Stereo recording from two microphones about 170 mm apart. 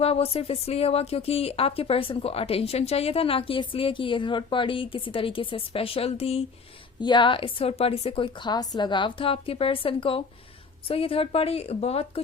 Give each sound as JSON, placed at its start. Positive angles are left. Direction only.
{"t": 0.0, "sound": "speech", "side_deg": 35}